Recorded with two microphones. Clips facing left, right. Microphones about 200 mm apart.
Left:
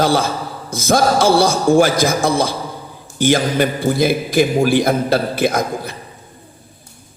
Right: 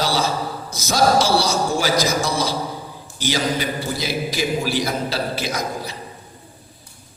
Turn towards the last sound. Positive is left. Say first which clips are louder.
# left 8 dB
turn(degrees=55)  # may be behind; listen again after turning